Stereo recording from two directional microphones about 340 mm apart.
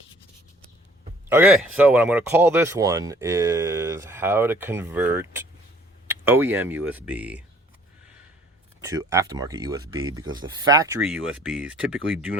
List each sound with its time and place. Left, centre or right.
1.3 s speech: centre
8.8 s speech: centre